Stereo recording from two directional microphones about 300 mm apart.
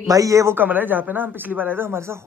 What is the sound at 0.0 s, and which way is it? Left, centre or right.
Speech, centre.